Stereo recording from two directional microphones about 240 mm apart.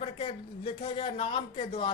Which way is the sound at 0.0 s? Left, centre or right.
Left.